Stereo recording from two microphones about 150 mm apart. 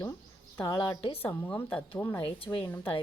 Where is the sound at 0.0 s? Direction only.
20° left (ahead or behind).